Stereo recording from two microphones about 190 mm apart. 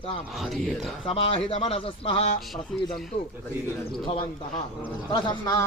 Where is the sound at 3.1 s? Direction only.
30° left (ahead or behind).